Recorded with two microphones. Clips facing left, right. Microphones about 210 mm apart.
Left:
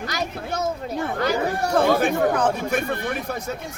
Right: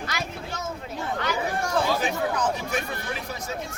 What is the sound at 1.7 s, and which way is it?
Speech, 55° left (ahead or behind).